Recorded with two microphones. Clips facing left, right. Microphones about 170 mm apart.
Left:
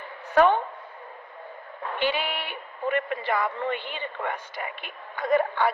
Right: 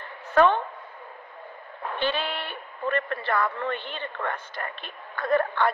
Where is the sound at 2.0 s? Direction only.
15° left (ahead or behind).